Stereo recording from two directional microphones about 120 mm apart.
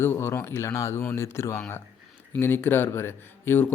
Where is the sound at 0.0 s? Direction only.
20° left (ahead or behind).